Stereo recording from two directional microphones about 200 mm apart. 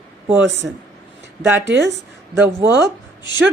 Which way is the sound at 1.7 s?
60° right (ahead or behind).